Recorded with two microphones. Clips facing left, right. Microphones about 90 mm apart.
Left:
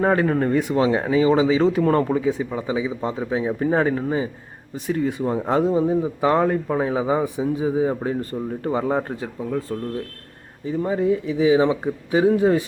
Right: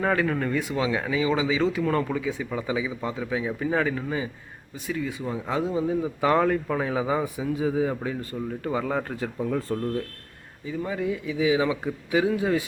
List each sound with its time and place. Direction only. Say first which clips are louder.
0.0 s speech: left 5 dB; 30° left (ahead or behind)
8.7 s speech: left 5 dB; 25° left (ahead or behind)
9.4 s speech: left 1 dB; 5° left (ahead or behind)
10.7 s speech: left 7 dB; 35° left (ahead or behind)